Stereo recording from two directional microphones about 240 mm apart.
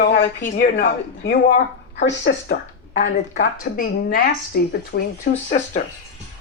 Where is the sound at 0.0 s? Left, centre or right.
Left.